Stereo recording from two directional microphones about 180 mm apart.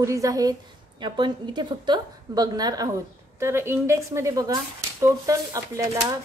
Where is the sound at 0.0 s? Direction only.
15° right (ahead or behind).